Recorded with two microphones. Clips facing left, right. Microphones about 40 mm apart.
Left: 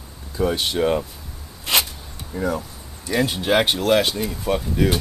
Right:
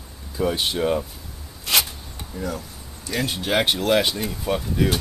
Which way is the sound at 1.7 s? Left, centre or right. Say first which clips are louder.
Left 1 dB; left.